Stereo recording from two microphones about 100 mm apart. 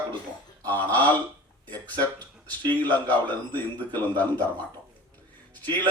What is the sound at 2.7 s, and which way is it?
A man's voice, 15° left (ahead or behind).